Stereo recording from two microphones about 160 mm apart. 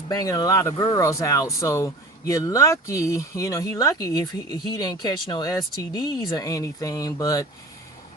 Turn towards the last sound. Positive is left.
turn(degrees=20)  # may be behind; listen again after turning